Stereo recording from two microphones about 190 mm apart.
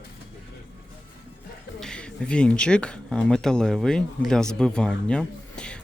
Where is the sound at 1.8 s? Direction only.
5° left (ahead or behind).